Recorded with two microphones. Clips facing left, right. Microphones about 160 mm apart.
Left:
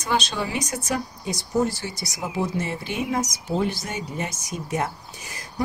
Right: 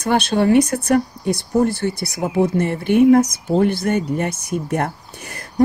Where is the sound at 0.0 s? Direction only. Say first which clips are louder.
Right 9 dB; 55° right (ahead or behind).